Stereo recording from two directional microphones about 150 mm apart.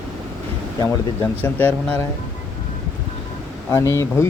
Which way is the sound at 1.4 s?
10° left (ahead or behind).